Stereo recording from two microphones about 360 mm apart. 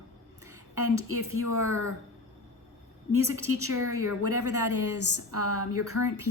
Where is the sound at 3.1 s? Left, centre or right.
Right.